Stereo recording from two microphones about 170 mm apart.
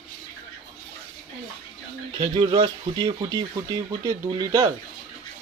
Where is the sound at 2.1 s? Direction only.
30° right (ahead or behind).